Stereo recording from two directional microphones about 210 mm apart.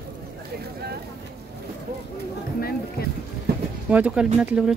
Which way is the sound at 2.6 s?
45° left (ahead or behind).